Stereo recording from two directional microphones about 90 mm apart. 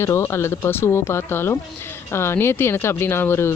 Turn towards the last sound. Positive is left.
turn(degrees=25)  # may be behind; listen again after turning